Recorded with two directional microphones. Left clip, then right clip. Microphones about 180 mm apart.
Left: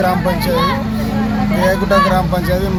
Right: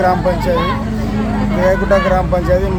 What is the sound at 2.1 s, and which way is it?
Speech, 15° right (ahead or behind).